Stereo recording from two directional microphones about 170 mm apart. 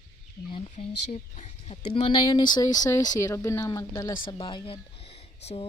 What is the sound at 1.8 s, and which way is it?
Speech, 35° left (ahead or behind).